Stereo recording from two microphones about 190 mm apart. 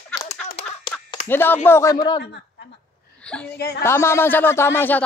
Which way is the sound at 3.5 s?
55° left (ahead or behind).